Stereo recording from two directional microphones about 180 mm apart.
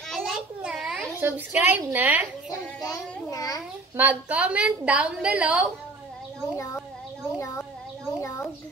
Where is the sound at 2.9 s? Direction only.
20° left (ahead or behind).